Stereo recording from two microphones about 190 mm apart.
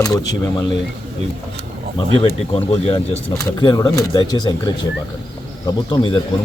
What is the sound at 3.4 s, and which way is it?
A man's voice, 20° left (ahead or behind).